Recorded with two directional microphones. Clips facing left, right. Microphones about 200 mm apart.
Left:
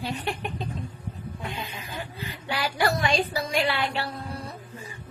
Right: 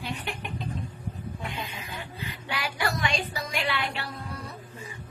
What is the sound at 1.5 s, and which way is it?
Music, 30° left (ahead or behind).